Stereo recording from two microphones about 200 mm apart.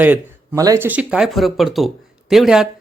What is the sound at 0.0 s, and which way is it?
Speech, 10° right (ahead or behind).